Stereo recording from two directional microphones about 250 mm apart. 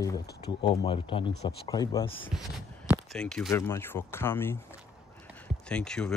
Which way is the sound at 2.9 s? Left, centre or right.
Centre.